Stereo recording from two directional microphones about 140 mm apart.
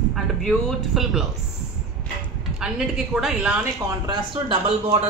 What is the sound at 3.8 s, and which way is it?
Speech, 30° right (ahead or behind).